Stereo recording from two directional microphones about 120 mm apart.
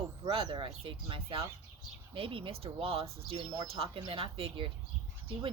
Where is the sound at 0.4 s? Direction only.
40° right (ahead or behind).